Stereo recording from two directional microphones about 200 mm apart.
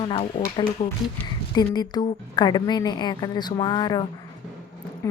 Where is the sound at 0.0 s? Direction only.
25° left (ahead or behind).